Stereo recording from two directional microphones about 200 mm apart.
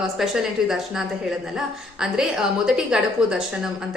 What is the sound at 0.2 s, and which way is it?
A woman's voice, centre (ahead or behind).